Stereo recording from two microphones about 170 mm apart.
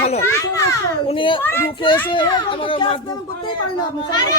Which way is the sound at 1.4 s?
10° left (ahead or behind).